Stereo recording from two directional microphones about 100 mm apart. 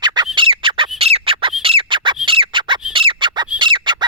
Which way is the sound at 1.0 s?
70° right (ahead or behind).